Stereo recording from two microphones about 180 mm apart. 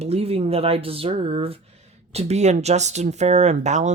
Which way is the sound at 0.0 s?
35° right (ahead or behind).